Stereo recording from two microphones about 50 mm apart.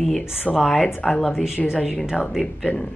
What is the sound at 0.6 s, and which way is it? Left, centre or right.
Speech, centre.